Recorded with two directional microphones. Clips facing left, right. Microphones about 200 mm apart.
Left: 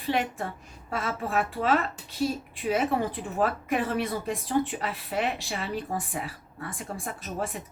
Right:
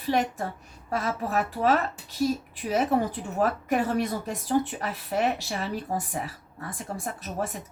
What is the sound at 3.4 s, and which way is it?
Speech, 40° right (ahead or behind).